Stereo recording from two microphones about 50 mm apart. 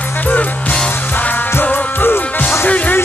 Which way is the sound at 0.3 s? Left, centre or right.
Left.